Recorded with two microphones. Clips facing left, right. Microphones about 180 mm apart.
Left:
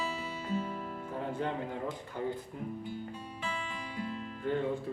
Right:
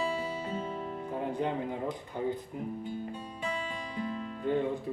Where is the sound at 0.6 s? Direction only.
25° right (ahead or behind).